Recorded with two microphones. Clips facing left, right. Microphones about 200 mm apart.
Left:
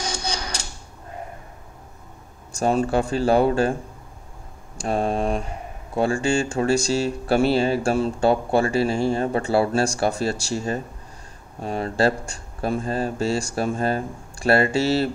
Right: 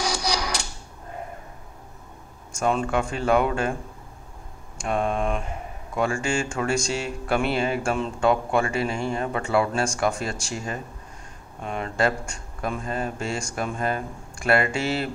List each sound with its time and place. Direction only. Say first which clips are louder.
0.0 s a sound: right 3 dB; 80° right
2.5 s speech: left 3 dB; 40° left (ahead or behind)
4.7 s speech: left 2 dB; 35° left (ahead or behind)